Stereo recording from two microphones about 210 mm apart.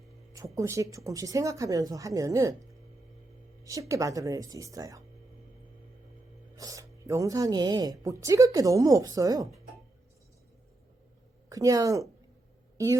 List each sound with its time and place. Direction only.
0.3 s speech: 15° right (ahead or behind)
6.6 s speech: 15° right (ahead or behind)
11.4 s a woman's voice: 15° right (ahead or behind)